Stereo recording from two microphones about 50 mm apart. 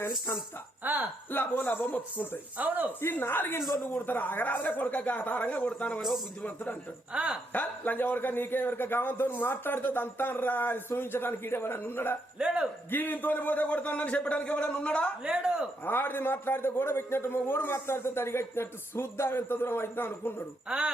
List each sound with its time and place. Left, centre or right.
0.8 s a sound: right
1.3 s a man's voice: left
2.6 s speech: right
3.0 s a man's voice: left
6.0 s a man's voice: centre
7.1 s speech: right
7.5 s a man's voice: left
12.4 s speech: centre
12.9 s a man's voice: left
15.2 s speech: centre
15.8 s a man's voice: left
20.7 s speech: centre